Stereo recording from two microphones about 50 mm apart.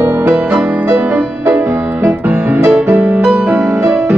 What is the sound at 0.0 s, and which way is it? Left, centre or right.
Music, right.